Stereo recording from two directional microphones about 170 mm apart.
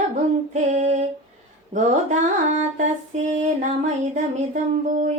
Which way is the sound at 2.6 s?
45° right (ahead or behind).